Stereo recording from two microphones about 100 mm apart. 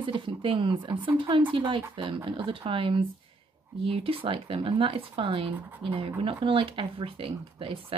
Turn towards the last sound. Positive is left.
turn(degrees=-60)  # may be behind; listen again after turning